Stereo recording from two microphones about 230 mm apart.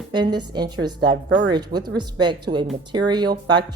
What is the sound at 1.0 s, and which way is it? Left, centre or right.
Speech, right.